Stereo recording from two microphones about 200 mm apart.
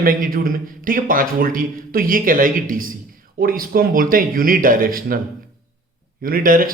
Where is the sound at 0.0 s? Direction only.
45° right (ahead or behind).